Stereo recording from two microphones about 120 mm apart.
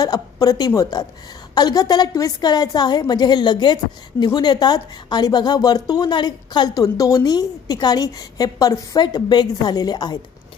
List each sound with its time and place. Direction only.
0.0 s a woman's voice: 30° left (ahead or behind)